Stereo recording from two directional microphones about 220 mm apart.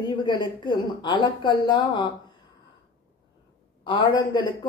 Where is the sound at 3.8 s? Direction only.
25° left (ahead or behind).